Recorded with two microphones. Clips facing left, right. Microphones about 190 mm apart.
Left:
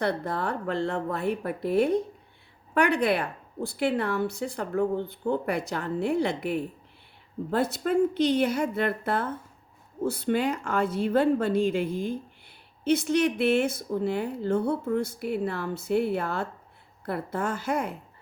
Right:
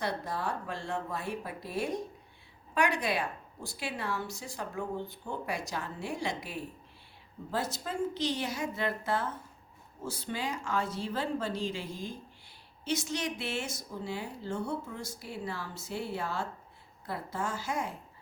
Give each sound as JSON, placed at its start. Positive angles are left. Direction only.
{"t": 0.0, "sound": "speech", "side_deg": 60}